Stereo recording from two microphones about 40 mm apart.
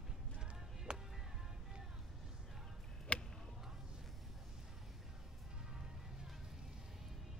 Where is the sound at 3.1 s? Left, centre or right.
Left.